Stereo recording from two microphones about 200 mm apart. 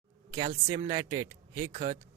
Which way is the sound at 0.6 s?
20° right (ahead or behind).